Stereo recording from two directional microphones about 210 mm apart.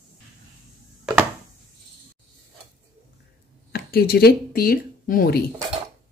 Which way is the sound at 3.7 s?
45° left (ahead or behind).